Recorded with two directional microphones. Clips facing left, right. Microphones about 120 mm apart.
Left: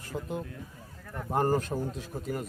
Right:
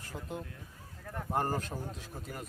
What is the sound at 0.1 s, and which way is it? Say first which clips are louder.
Speech: left 6 dB; 20° left (ahead or behind).